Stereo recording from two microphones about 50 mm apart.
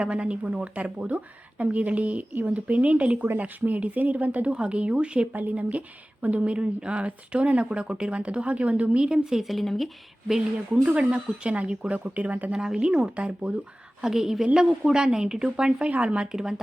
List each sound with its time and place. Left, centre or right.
0.0 s speech: right
4.5 s speech: right
5.3 s speech: right
9.0 s speech: centre
9.4 s speech: centre
10.8 s speech: right
12.5 s speech: centre
14.0 s speech: centre